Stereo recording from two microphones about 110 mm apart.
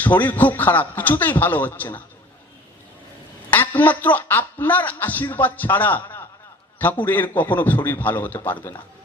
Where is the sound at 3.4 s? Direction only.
15° left (ahead or behind).